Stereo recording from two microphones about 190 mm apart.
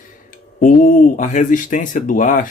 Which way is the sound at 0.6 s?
45° left (ahead or behind).